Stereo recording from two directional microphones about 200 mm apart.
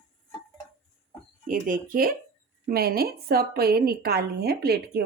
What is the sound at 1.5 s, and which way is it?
A woman's voice, 45° right (ahead or behind).